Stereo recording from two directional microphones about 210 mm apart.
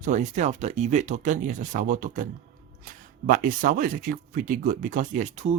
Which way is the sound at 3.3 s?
40° right (ahead or behind).